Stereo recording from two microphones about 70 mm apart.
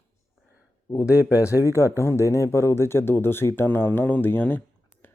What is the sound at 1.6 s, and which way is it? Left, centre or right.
Speech, right.